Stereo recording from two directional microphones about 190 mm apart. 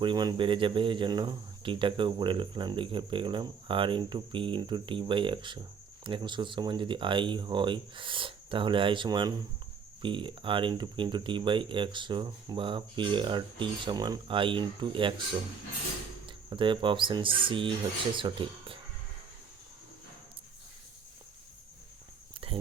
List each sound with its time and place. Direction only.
0.0 s speech: 25° right (ahead or behind)
16.2 s speech: 25° right (ahead or behind)